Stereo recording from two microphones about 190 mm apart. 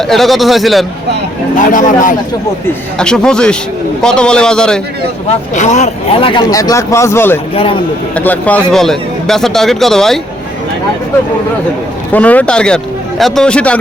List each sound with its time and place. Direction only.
0.0 s a man's voice: centre (ahead or behind)
1.5 s speech: 45° left (ahead or behind)
3.0 s a man's voice: 5° left (ahead or behind)
5.5 s speech: 40° left (ahead or behind); by 7.3 s 15° left (ahead or behind)
7.5 s speech: 30° left (ahead or behind)
8.1 s a man's voice: 10° left (ahead or behind)
12.1 s a man's voice: 10° left (ahead or behind)